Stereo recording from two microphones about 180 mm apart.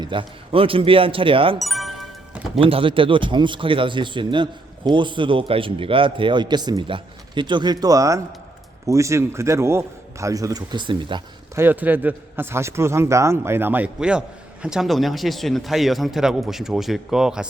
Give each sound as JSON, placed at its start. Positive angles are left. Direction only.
{"t": 0.0, "sound": "a man's voice", "side_deg": -30}
{"t": 1.5, "sound": "music", "side_deg": 0}
{"t": 2.6, "sound": "a man's voice", "side_deg": -30}
{"t": 11.5, "sound": "a man's voice", "side_deg": -10}